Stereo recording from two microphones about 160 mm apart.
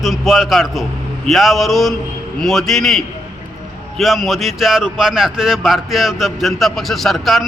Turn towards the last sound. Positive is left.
turn(degrees=0)  # may be behind; listen again after turning